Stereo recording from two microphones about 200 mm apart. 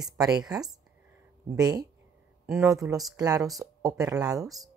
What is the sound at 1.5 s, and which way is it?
Speech, 20° right (ahead or behind).